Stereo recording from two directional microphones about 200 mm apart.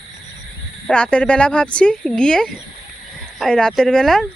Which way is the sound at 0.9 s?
5° left (ahead or behind).